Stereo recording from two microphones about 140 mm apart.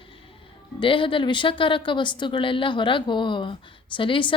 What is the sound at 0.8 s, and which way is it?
A woman's voice, 40° left (ahead or behind).